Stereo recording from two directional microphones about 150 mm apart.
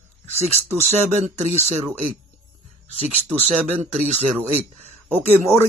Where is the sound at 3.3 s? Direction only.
45° right (ahead or behind).